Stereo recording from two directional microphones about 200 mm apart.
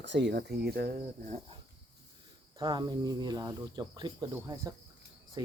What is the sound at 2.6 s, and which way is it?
Speech, 20° right (ahead or behind).